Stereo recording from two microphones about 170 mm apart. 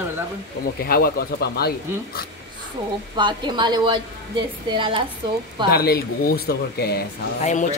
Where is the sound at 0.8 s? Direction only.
60° left (ahead or behind).